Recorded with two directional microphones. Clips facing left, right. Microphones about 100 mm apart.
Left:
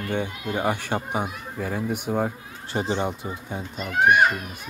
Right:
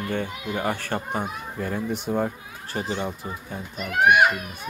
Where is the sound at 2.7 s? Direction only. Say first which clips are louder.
Left 3 dB; 30° left (ahead or behind).